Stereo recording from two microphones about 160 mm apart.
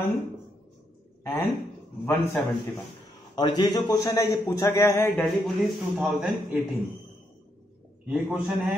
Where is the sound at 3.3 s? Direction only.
25° left (ahead or behind).